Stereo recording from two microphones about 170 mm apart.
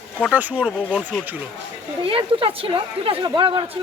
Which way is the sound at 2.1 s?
30° right (ahead or behind).